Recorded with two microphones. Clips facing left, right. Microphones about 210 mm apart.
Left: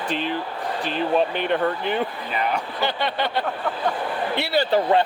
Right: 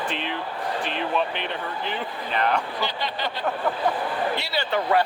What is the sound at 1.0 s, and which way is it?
Speech, 40° left (ahead or behind).